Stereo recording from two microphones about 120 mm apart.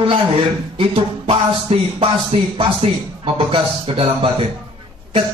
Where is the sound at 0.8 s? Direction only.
55° right (ahead or behind).